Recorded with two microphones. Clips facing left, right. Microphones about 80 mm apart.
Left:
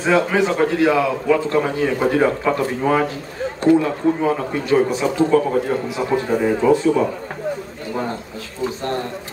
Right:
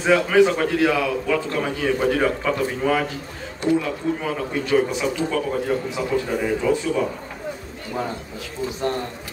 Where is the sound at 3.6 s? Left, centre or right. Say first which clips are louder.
Left 6 dB; left.